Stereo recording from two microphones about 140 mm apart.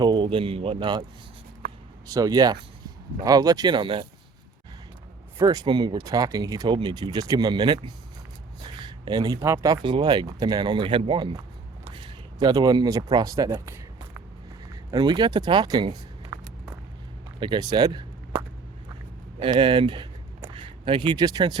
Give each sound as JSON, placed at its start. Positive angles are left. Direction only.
{"t": 0.0, "sound": "speech", "side_deg": -35}
{"t": 2.0, "sound": "speech", "side_deg": -25}
{"t": 5.4, "sound": "speech", "side_deg": -25}
{"t": 8.6, "sound": "a sound", "side_deg": -30}
{"t": 9.5, "sound": "speech", "side_deg": -30}
{"t": 11.9, "sound": "a sound", "side_deg": -35}
{"t": 14.8, "sound": "a sound", "side_deg": -30}
{"t": 17.4, "sound": "speech", "side_deg": -30}
{"t": 19.4, "sound": "speech", "side_deg": -35}